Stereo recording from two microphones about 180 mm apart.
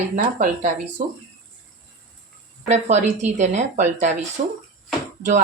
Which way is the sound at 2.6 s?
40° right (ahead or behind).